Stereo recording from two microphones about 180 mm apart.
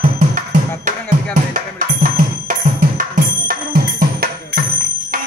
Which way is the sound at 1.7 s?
50° right (ahead or behind).